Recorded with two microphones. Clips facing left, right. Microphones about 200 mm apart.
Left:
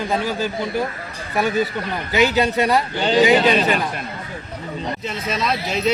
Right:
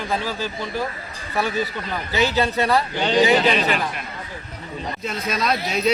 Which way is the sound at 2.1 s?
15° left (ahead or behind).